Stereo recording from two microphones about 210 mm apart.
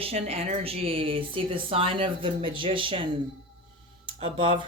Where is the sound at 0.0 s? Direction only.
30° right (ahead or behind).